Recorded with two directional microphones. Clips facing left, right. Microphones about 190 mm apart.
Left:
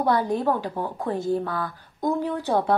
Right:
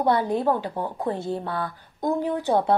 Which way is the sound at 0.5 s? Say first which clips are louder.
Right 1 dB; 20° right (ahead or behind).